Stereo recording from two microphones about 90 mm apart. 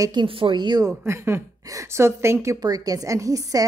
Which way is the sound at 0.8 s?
30° right (ahead or behind).